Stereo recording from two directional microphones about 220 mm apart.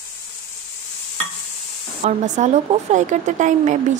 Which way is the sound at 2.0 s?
30° right (ahead or behind).